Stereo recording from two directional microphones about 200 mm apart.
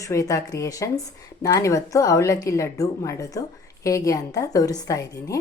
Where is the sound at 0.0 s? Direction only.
15° left (ahead or behind).